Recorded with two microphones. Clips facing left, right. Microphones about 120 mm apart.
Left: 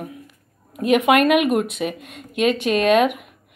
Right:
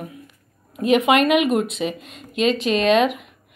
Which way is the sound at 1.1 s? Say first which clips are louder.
Left 2 dB; 50° left (ahead or behind).